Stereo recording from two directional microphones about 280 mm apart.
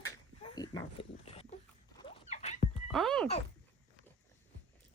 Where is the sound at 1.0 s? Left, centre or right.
Left.